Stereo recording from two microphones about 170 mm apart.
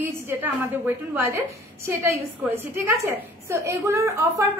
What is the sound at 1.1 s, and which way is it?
A woman's voice, 15° right (ahead or behind).